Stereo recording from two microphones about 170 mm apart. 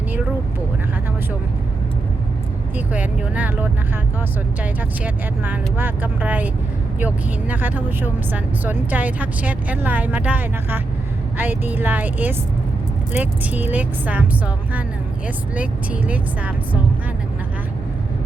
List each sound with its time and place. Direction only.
2.7 s speech: 10° right (ahead or behind)